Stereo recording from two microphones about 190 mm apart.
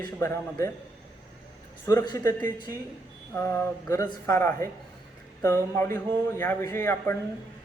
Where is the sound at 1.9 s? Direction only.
15° left (ahead or behind).